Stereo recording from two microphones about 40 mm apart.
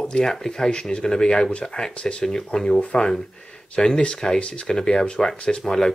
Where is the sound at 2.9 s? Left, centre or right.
Left.